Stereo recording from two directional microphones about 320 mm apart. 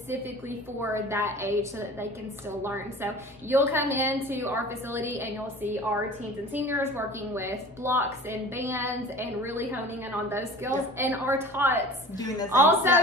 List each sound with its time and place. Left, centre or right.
0.1 s a woman's voice: centre